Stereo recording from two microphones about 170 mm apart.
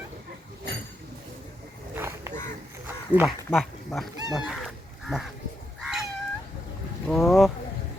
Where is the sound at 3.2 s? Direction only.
Centre (ahead or behind).